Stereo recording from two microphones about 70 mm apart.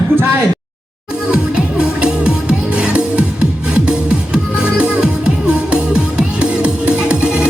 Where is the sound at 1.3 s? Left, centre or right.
Centre.